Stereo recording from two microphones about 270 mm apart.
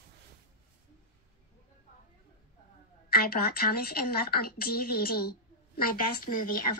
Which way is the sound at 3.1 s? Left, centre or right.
Left.